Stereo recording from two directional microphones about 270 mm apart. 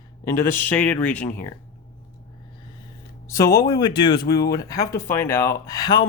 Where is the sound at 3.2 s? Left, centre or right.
Centre.